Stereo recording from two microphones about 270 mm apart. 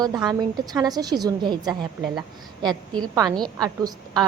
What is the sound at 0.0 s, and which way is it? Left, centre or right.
A woman's voice, centre.